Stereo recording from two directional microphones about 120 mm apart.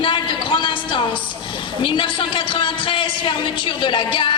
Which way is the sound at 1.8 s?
45° left (ahead or behind).